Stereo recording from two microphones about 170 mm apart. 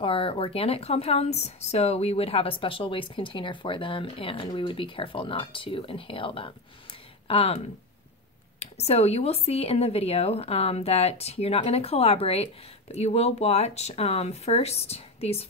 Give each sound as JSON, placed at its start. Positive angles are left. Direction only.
{"t": 0.0, "sound": "speech", "side_deg": 30}